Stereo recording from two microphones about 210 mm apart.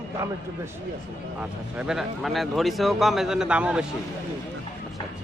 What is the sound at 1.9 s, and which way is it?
A man's voice, centre (ahead or behind).